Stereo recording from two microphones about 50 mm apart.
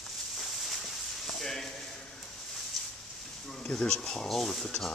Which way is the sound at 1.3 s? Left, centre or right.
Centre.